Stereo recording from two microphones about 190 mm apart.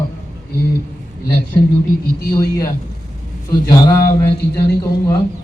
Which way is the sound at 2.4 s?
15° left (ahead or behind).